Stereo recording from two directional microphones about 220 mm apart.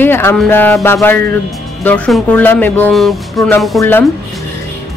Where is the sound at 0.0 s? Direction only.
10° left (ahead or behind).